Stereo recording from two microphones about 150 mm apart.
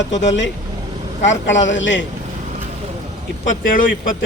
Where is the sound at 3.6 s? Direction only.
65° left (ahead or behind).